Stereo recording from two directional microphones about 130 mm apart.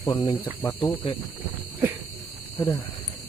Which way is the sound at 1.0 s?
40° left (ahead or behind).